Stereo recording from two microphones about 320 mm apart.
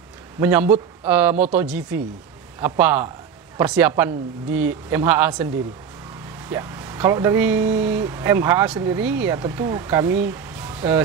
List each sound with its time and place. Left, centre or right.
0.4 s a woman's voice: centre
6.5 s speech: centre